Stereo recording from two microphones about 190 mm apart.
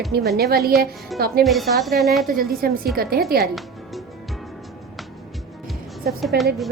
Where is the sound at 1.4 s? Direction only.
Centre (ahead or behind).